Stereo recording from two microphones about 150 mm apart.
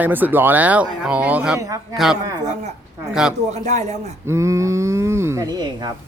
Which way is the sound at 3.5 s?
50° right (ahead or behind).